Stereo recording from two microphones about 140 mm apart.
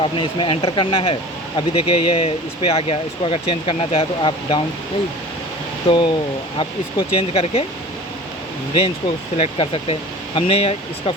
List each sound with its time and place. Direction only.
0.0 s speech: 35° left (ahead or behind)
5.9 s speech: 35° left (ahead or behind)
9.4 s speech: 40° left (ahead or behind)